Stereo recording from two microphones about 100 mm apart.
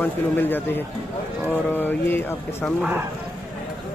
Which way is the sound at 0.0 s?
20° left (ahead or behind).